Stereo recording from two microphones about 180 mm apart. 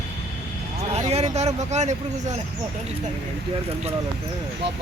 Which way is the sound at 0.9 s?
35° right (ahead or behind).